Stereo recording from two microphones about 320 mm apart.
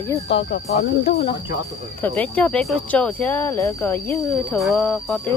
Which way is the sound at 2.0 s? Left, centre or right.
Centre.